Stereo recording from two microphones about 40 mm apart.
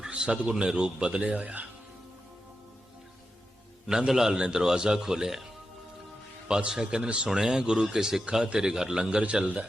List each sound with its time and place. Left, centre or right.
0.1 s a man's voice: right
3.8 s a man's voice: centre
6.5 s a man's voice: centre
9.0 s speech: right